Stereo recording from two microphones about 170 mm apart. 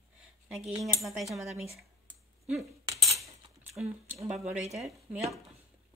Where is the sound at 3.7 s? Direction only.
5° right (ahead or behind).